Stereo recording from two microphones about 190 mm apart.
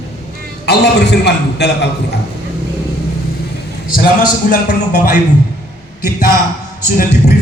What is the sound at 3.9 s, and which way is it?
Speech, 50° left (ahead or behind).